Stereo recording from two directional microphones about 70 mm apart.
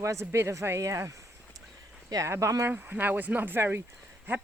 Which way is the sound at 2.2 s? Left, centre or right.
Right.